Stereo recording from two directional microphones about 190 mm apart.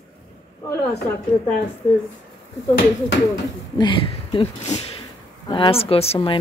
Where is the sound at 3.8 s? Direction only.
25° left (ahead or behind).